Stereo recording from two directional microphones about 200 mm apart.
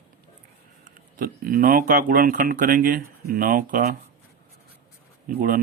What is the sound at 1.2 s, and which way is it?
Speech, 45° right (ahead or behind).